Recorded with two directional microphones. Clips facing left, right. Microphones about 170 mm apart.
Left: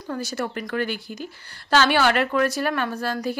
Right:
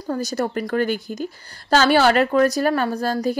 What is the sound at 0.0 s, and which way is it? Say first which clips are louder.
A woman's voice: right 5 dB; 35° right (ahead or behind).